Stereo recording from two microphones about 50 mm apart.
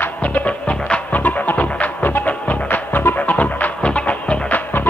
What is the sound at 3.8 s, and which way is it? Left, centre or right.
Music, left.